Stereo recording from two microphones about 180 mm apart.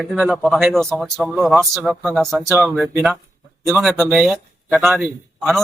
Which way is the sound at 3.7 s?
10° right (ahead or behind).